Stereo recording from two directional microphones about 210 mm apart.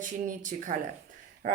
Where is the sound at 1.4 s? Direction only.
45° right (ahead or behind).